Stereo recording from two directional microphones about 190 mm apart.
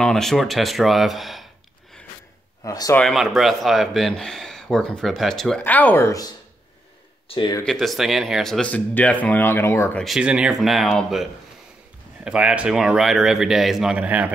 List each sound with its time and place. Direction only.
0.0 s music: centre (ahead or behind)
2.6 s speech: 15° left (ahead or behind)
3.0 s speech: centre (ahead or behind); by 7.6 s 25° left (ahead or behind)
7.6 s speech: centre (ahead or behind)
10.0 s speech: 5° right (ahead or behind)
12.3 s speech: 5° right (ahead or behind)